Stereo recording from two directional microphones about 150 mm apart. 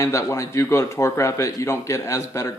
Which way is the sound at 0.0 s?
20° left (ahead or behind).